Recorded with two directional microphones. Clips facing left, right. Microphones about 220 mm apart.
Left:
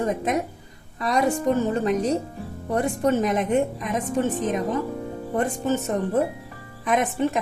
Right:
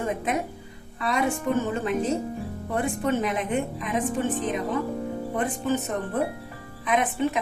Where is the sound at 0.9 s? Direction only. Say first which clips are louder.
Left 3 dB; 40° left (ahead or behind).